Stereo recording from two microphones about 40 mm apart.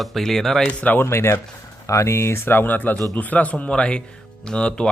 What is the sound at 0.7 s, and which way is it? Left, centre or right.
Speech, left.